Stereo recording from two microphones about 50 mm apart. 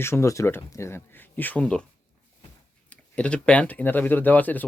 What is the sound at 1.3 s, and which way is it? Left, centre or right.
Speech, left.